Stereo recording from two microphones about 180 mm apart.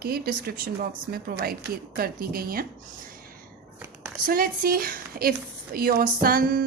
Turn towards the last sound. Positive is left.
turn(degrees=-55)  # may be behind; listen again after turning